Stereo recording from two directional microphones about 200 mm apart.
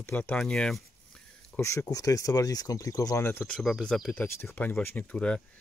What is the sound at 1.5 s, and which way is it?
Speech, 15° left (ahead or behind).